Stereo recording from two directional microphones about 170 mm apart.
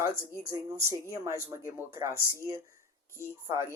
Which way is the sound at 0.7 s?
20° right (ahead or behind).